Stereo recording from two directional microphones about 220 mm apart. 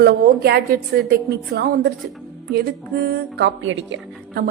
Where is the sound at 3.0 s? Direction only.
55° right (ahead or behind).